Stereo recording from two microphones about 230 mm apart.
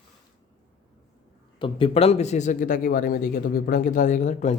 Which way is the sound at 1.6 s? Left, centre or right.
Left.